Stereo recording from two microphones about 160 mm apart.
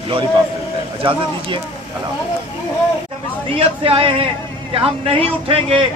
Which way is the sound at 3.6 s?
35° right (ahead or behind).